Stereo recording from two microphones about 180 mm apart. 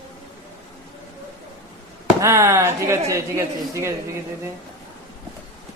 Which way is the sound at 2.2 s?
15° right (ahead or behind).